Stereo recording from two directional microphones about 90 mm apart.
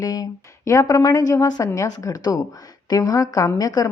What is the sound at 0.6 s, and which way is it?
Speech, 35° left (ahead or behind).